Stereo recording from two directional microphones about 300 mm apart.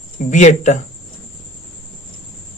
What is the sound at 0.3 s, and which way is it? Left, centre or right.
Speech, left.